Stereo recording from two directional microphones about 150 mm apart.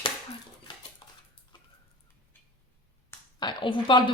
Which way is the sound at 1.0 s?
30° left (ahead or behind).